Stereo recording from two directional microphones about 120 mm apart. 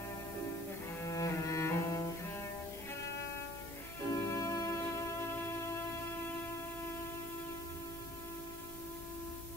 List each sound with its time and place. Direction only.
1.0 s cello: 25° left (ahead or behind)
4.1 s music: 25° left (ahead or behind)